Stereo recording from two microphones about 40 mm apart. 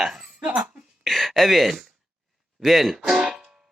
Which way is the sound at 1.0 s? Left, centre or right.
Centre.